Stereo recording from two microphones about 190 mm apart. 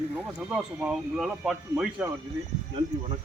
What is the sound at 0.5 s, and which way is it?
Speech, 5° right (ahead or behind).